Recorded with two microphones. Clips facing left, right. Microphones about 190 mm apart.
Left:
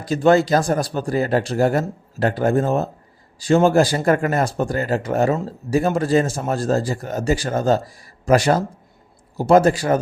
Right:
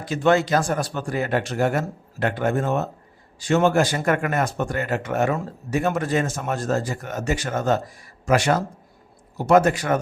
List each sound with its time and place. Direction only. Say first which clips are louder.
0.0 s speech: left 4 dB; 35° left (ahead or behind)